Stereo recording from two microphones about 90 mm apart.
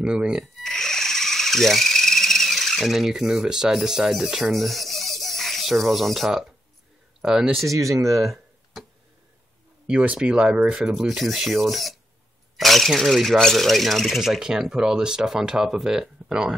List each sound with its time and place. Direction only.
0.0 s speech: 10° right (ahead or behind)
0.6 s a sound: 5° left (ahead or behind)
7.2 s speech: 10° right (ahead or behind)
7.6 s speech: 35° right (ahead or behind)
9.8 s speech: 10° right (ahead or behind)